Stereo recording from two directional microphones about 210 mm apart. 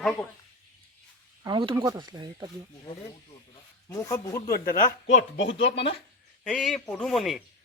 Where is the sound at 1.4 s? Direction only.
20° right (ahead or behind).